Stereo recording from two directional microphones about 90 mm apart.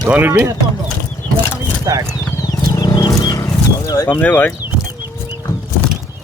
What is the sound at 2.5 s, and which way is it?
Wild animals, 45° left (ahead or behind).